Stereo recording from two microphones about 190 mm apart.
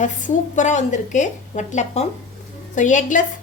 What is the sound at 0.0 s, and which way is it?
A woman's voice, 40° left (ahead or behind).